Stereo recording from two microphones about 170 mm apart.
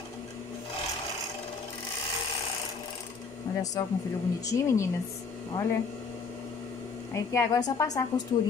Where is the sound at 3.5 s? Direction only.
25° left (ahead or behind).